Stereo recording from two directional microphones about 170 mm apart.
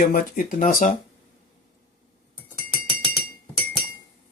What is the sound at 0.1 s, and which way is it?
Speech, 55° left (ahead or behind).